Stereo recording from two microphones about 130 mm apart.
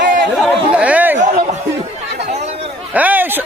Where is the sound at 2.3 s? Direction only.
60° right (ahead or behind).